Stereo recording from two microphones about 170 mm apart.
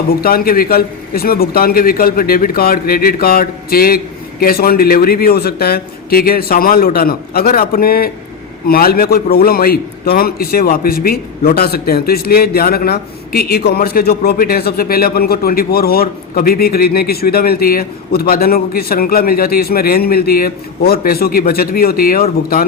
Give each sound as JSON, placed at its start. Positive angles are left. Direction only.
{"t": 0.2, "sound": "speech", "side_deg": 60}